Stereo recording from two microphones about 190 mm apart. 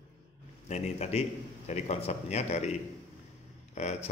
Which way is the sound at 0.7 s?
35° left (ahead or behind).